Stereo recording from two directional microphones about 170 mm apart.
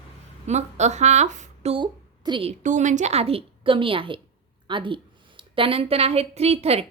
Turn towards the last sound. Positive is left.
turn(degrees=-35)  # may be behind; listen again after turning